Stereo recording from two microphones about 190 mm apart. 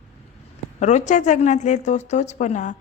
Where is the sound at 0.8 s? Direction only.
40° left (ahead or behind).